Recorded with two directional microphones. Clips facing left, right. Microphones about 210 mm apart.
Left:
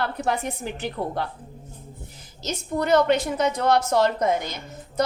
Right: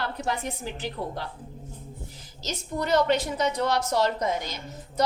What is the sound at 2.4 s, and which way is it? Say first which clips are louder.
A woman's voice: left 5 dB; 55° left (ahead or behind).